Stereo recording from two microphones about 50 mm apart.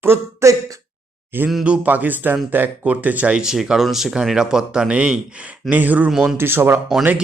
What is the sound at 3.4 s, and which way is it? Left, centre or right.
Speech, centre.